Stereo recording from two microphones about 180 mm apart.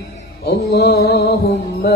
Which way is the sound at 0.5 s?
65° left (ahead or behind).